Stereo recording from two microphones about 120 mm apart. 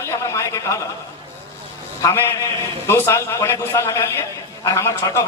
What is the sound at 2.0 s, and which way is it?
Speech, 25° left (ahead or behind).